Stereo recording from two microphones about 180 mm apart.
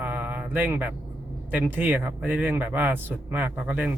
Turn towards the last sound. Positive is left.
turn(degrees=-10)  # may be behind; listen again after turning